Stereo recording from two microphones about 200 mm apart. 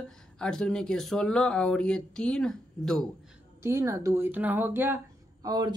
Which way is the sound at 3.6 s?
15° right (ahead or behind).